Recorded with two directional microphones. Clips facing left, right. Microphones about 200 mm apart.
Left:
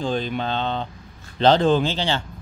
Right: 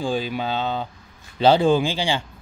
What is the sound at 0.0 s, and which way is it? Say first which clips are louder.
Speech: even; 5° right (ahead or behind).